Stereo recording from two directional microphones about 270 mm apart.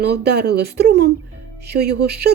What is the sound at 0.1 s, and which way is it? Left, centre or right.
A woman's voice, right.